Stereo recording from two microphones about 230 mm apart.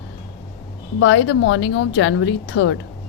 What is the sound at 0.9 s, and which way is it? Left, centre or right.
A woman's voice, left.